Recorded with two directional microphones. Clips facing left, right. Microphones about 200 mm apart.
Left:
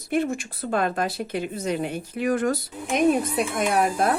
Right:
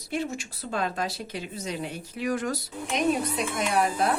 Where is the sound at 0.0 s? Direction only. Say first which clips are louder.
Left 6 dB; 55° left (ahead or behind).